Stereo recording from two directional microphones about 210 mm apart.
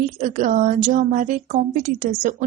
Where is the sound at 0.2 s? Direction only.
35° right (ahead or behind).